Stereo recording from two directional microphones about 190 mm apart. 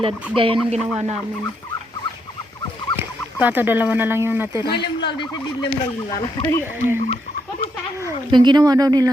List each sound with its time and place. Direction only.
0.0 s speech: 30° right (ahead or behind)
3.0 s speech: 10° right (ahead or behind)
4.8 s turkey: 65° left (ahead or behind)
5.3 s fowl: 25° left (ahead or behind)
6.8 s speech: 40° left (ahead or behind)
8.0 s speech: 25° right (ahead or behind)